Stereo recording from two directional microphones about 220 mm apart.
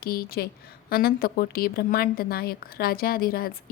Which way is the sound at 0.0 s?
45° left (ahead or behind).